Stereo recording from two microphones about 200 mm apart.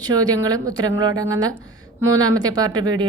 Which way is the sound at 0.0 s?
20° right (ahead or behind).